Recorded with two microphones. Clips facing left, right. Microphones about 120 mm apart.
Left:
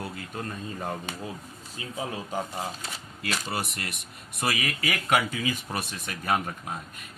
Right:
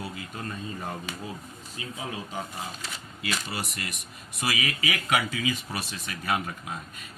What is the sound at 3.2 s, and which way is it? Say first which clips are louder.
Speech: left 2 dB; 55° left (ahead or behind).